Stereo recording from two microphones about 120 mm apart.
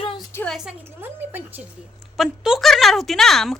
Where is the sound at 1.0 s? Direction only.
15° right (ahead or behind).